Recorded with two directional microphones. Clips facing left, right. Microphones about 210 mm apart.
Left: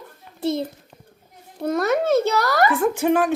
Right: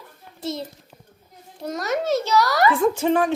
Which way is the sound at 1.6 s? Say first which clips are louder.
Left 5 dB; 55° left (ahead or behind).